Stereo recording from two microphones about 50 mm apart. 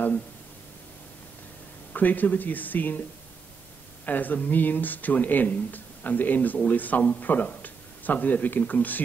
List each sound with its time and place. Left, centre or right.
2.0 s speech: left
4.0 s a man's voice: left